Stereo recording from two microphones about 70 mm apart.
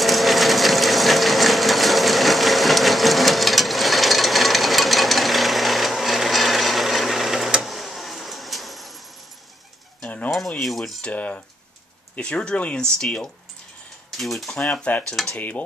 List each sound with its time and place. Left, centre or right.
0.0 s sewing machine: centre
10.0 s cutlery: centre
10.6 s cutlery: centre
11.0 s speech: centre
14.7 s speech: centre
15.3 s cutlery: left